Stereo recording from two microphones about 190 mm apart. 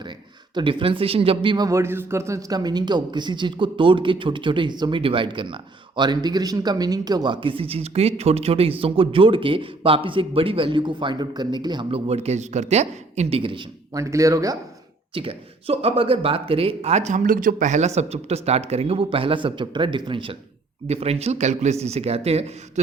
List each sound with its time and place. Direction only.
0.5 s speech: 25° right (ahead or behind)
14.0 s speech: 15° right (ahead or behind)
15.1 s speech: 30° right (ahead or behind)